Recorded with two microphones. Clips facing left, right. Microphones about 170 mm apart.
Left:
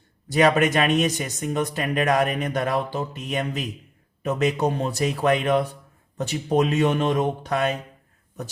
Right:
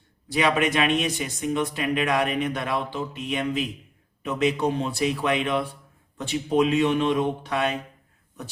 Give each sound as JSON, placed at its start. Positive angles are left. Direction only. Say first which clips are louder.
{"t": 0.3, "sound": "speech", "louder": "left 4 dB", "side_deg": 40}